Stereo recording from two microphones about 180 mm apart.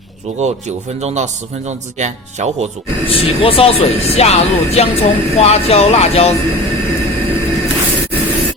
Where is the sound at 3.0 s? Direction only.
30° left (ahead or behind).